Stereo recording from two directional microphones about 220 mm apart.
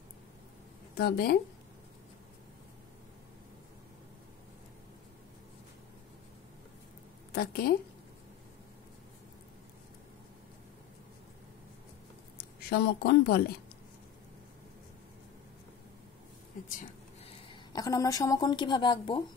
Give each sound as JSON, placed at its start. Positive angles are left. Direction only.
{"t": 0.9, "sound": "speech", "side_deg": 45}
{"t": 7.3, "sound": "speech", "side_deg": 45}
{"t": 12.4, "sound": "a woman's voice", "side_deg": 45}
{"t": 16.6, "sound": "speech", "side_deg": 35}
{"t": 17.5, "sound": "a woman's voice", "side_deg": 15}